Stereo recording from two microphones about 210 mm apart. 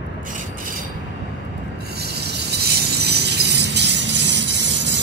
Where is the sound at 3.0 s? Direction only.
55° right (ahead or behind).